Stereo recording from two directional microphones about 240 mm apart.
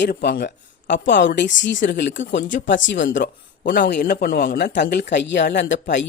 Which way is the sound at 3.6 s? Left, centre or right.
Left.